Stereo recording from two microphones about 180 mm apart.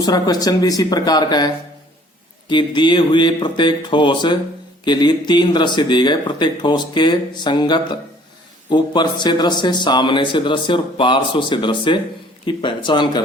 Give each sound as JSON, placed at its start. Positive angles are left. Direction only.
{"t": 0.0, "sound": "a man's voice", "side_deg": 20}